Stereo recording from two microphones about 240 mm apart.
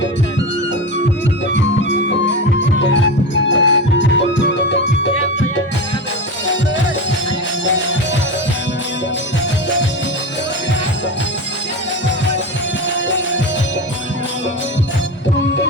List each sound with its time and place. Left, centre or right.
1.8 s music: left
15.4 s music: left